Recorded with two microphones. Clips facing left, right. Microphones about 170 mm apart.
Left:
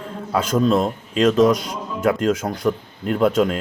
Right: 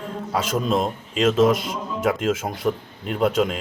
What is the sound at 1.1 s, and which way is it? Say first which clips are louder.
A man's voice: left 2 dB; 5° right (ahead or behind).